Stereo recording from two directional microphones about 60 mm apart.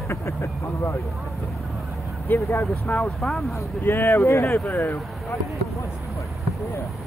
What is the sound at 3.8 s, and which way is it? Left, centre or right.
Speech, left.